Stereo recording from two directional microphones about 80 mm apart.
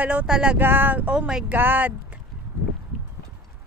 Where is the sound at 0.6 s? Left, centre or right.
Right; by 1.4 s centre.